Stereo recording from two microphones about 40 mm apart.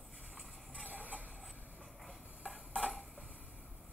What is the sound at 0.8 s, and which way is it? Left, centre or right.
Music, right.